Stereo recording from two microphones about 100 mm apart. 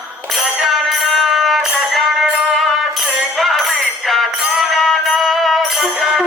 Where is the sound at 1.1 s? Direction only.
Centre (ahead or behind).